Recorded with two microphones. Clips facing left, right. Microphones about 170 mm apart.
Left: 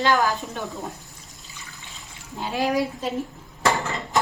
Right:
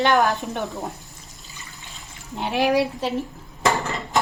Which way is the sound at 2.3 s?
70° right (ahead or behind).